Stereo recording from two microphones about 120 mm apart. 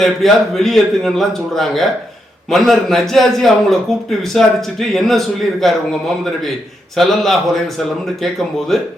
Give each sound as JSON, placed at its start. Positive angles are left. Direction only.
{"t": 0.0, "sound": "a man's voice", "side_deg": 0}
{"t": 6.9, "sound": "a man's voice", "side_deg": 0}